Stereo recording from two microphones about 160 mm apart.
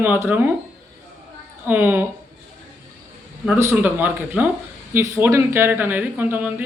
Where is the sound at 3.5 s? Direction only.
10° right (ahead or behind).